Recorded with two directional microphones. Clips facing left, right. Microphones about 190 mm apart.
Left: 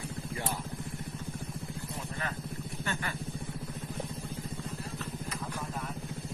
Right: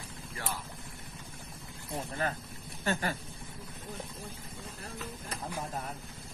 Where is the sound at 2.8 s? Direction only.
40° right (ahead or behind).